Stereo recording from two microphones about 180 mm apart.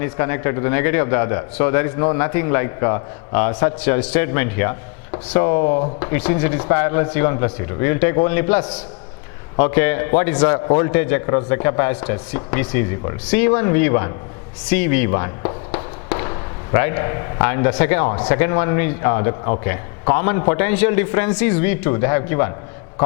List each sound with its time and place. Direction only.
0.0 s a man's voice: 15° left (ahead or behind)